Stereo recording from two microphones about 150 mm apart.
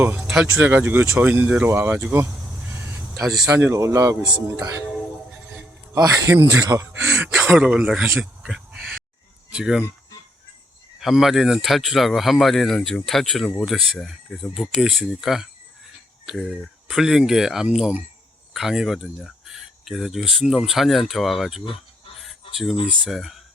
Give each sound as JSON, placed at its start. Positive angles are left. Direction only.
{"t": 0.0, "sound": "speech", "side_deg": -10}
{"t": 3.7, "sound": "speech", "side_deg": -20}
{"t": 6.3, "sound": "a man's voice", "side_deg": -15}
{"t": 11.0, "sound": "speech", "side_deg": 0}
{"t": 22.2, "sound": "fowl", "side_deg": 0}
{"t": 23.0, "sound": "speech", "side_deg": 0}